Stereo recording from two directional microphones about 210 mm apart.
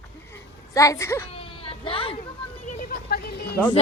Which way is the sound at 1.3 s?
25° left (ahead or behind).